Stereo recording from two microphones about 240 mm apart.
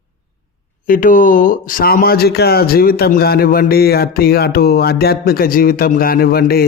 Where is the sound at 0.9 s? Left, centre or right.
Left.